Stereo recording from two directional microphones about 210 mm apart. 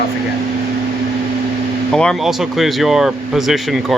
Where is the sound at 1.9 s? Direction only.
Centre (ahead or behind).